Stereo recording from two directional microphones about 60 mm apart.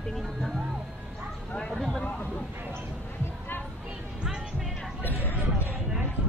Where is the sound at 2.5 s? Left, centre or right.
Right.